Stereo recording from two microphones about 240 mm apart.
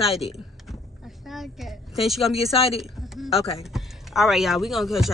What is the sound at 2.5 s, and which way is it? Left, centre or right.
Speech, left.